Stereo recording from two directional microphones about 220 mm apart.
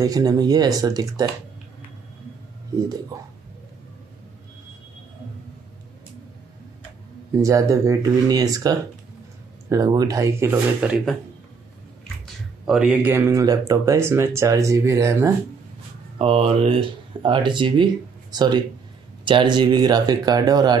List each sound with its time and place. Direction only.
0.0 s speech: 15° right (ahead or behind)
7.3 s speech: 15° right (ahead or behind)
12.6 s speech: 5° right (ahead or behind)
16.2 s speech: 25° right (ahead or behind)